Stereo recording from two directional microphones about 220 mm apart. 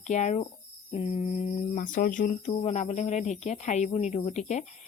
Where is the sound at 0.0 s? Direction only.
30° left (ahead or behind).